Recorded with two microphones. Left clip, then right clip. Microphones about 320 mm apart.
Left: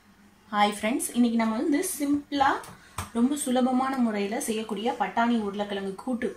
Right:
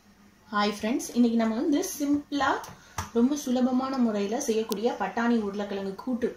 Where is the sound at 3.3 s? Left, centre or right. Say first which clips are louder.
Left 2 dB; left.